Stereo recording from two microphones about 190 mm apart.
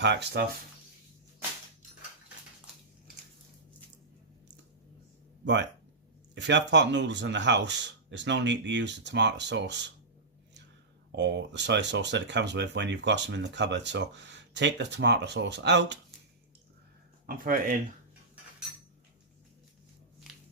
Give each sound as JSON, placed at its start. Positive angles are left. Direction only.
{"t": 0.0, "sound": "speech", "side_deg": -65}
{"t": 6.3, "sound": "speech", "side_deg": -65}
{"t": 11.1, "sound": "speech", "side_deg": -65}
{"t": 17.2, "sound": "speech", "side_deg": -50}